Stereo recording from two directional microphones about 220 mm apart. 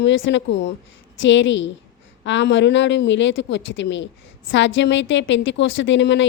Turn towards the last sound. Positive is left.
turn(degrees=55)  # may be behind; listen again after turning